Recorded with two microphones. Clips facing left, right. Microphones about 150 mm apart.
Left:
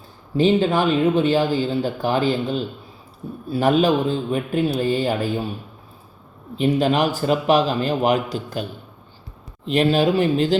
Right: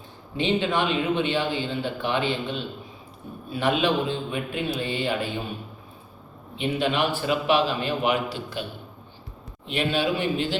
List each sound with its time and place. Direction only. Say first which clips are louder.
0.3 s speech: left 7 dB; 35° left (ahead or behind)
6.6 s speech: left 6 dB; 40° left (ahead or behind)
9.7 s speech: left 7 dB; 40° left (ahead or behind)